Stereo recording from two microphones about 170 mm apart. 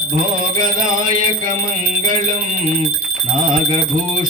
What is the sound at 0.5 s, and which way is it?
Music, 50° right (ahead or behind).